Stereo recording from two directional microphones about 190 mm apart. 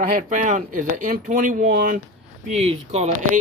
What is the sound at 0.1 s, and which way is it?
Speech, 45° right (ahead or behind).